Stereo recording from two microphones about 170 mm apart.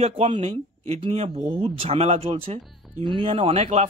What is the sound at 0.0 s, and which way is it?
Speech, 35° right (ahead or behind).